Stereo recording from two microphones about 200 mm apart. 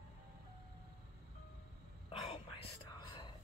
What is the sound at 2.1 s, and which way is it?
Whispering, 30° left (ahead or behind).